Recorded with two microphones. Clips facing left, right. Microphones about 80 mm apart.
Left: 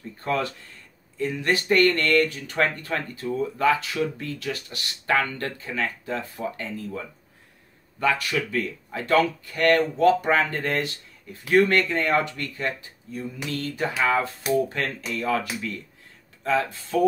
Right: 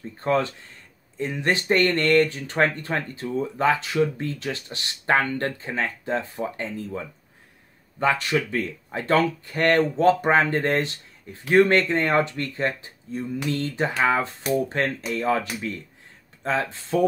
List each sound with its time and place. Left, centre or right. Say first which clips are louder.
0.2 s speech: right 4 dB; right
8.0 s speech: right 2 dB; right